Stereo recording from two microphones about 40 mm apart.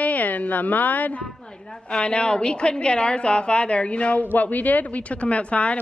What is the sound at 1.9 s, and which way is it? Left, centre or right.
A woman's voice, left.